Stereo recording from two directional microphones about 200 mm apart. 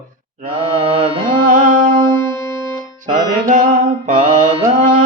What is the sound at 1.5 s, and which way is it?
Music, 40° right (ahead or behind).